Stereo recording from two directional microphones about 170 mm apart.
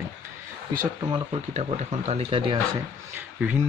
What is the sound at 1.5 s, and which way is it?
Speech, 40° right (ahead or behind).